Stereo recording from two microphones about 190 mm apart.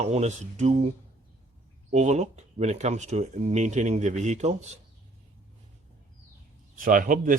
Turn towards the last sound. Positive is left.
turn(degrees=-45)  # may be behind; listen again after turning